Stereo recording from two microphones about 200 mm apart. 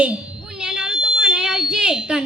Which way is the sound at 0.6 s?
5° right (ahead or behind).